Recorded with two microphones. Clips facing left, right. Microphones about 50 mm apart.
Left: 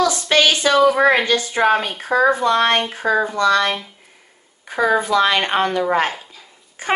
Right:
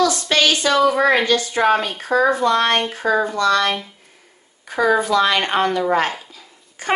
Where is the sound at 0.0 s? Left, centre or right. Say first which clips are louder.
Left 1 dB; left.